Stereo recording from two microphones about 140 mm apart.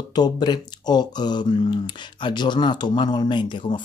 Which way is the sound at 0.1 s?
30° left (ahead or behind).